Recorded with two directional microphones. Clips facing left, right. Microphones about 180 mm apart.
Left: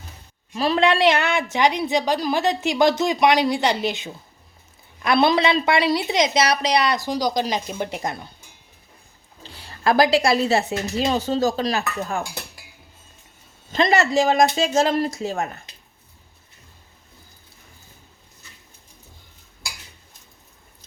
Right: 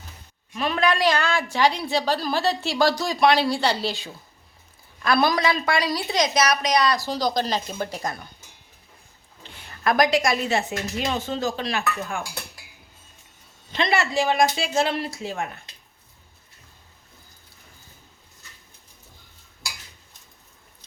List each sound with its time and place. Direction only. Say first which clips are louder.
0.5 s a woman's voice: left 4 dB; 35° left (ahead or behind)
9.4 s a woman's voice: left 3 dB; 35° left (ahead or behind)
13.7 s a woman's voice: left 5 dB; 45° left (ahead or behind)